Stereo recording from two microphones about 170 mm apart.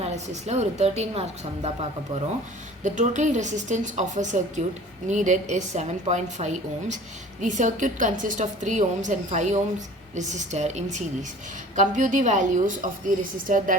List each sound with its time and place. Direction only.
0.0 s a woman's voice: 40° right (ahead or behind)
2.8 s a woman's voice: 45° right (ahead or behind)